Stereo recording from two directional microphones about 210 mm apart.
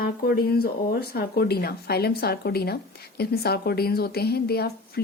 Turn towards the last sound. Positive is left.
turn(degrees=50)  # may be behind; listen again after turning